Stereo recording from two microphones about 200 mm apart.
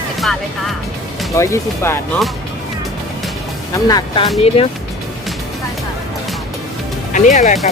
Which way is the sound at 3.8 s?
20° left (ahead or behind).